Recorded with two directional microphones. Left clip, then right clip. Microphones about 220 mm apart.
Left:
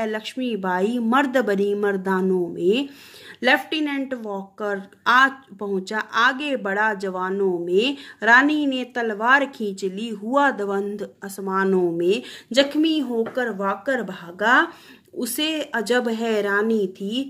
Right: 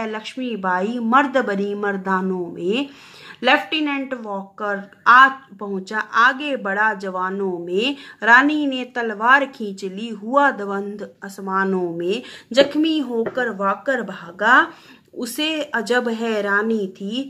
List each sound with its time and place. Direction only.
0.0 s a woman's voice: 40° left (ahead or behind)